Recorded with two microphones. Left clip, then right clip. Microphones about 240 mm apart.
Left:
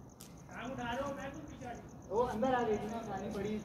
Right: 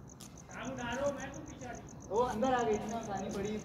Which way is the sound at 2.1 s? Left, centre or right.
Centre.